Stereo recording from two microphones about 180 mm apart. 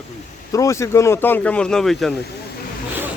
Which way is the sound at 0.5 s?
15° left (ahead or behind).